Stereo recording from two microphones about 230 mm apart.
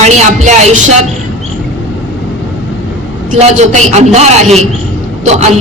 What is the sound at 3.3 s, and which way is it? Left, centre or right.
A man's voice, right.